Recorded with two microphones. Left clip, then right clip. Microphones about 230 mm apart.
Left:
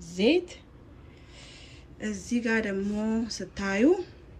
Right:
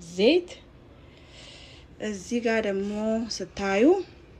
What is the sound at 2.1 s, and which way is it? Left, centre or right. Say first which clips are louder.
Speech: right 1 dB; left.